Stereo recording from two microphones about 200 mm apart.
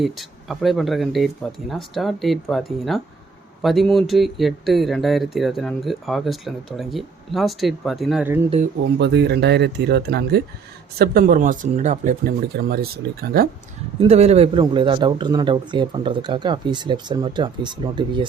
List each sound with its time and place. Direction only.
0.0 s speech: centre (ahead or behind)
9.0 s speech: 60° right (ahead or behind)
14.0 s a man's voice: 30° right (ahead or behind)